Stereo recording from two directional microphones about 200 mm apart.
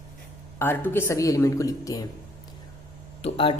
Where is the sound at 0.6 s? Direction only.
10° left (ahead or behind).